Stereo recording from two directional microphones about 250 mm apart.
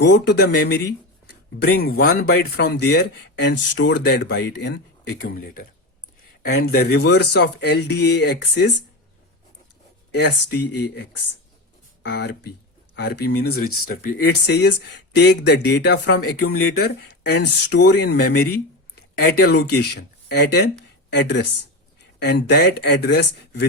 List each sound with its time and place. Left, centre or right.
0.0 s speech: left
6.4 s speech: left
10.1 s speech: left
12.0 s speech: left